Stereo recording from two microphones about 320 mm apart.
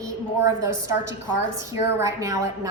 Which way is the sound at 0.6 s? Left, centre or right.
Right.